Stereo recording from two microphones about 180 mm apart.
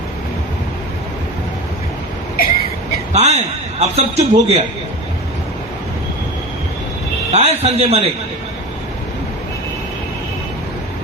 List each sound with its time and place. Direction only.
2.3 s vehicle: 55° left (ahead or behind)
3.1 s a man's voice: 40° right (ahead or behind)
7.3 s a man's voice: 35° right (ahead or behind)